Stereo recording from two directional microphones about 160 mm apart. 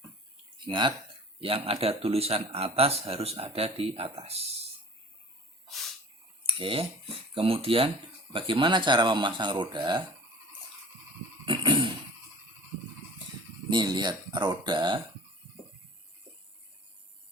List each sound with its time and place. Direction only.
0.6 s speech: 30° right (ahead or behind)
5.6 s snort: centre (ahead or behind)
6.4 s speech: 35° right (ahead or behind)
11.4 s a sound: 30° right (ahead or behind)
13.7 s speech: 25° right (ahead or behind)